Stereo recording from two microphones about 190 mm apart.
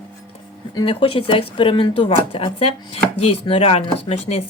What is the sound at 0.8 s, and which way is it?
Speech, 30° left (ahead or behind).